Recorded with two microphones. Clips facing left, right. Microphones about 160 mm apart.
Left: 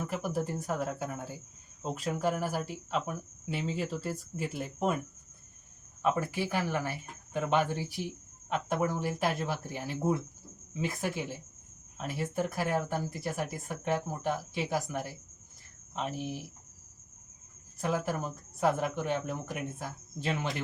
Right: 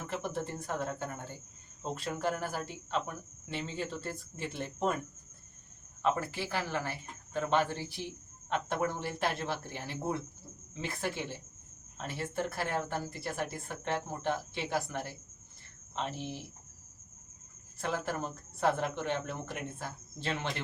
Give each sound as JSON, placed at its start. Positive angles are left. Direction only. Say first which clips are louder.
{"t": 0.1, "sound": "speech", "louder": "left 3 dB", "side_deg": 5}
{"t": 6.0, "sound": "speech", "louder": "left 2 dB", "side_deg": 15}
{"t": 17.7, "sound": "speech", "louder": "left 3 dB", "side_deg": 10}